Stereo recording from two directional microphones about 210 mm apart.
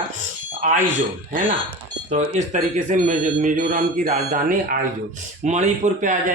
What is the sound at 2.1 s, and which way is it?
Speech, 35° right (ahead or behind).